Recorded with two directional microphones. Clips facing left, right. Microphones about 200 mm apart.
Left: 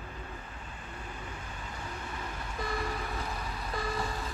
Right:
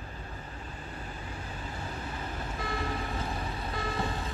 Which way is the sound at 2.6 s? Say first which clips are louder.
Right 1 dB; 25° right (ahead or behind).